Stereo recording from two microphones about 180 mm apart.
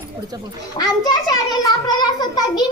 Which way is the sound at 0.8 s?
20° left (ahead or behind).